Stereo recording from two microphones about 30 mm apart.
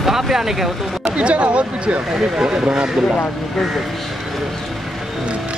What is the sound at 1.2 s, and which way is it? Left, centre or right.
Speech, right.